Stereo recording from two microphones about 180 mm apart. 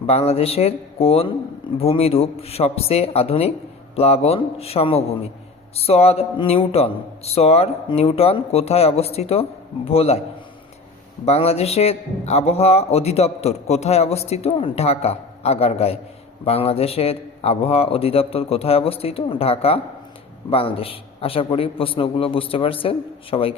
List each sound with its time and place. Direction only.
0.1 s a man's voice: 35° left (ahead or behind)
11.3 s a man's voice: 35° left (ahead or behind)